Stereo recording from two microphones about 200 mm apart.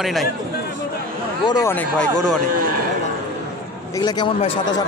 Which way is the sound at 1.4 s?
20° left (ahead or behind).